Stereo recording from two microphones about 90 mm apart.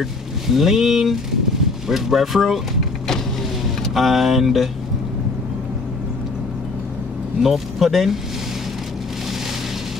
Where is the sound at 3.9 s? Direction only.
Centre (ahead or behind).